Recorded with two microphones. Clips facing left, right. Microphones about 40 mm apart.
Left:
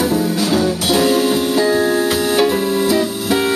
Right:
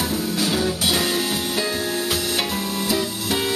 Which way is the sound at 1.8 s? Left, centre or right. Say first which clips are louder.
Left 9 dB; left.